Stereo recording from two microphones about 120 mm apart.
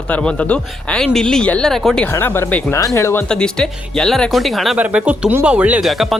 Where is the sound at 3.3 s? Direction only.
5° left (ahead or behind).